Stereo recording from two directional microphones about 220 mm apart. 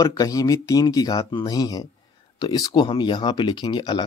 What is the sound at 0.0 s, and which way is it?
Speech, 15° left (ahead or behind).